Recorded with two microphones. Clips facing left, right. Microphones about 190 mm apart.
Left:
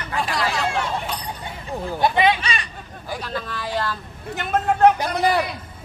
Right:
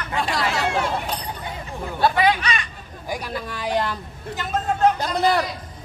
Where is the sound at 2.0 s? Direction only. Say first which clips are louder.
Even; 25° left (ahead or behind).